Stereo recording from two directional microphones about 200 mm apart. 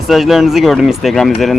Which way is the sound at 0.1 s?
Centre (ahead or behind).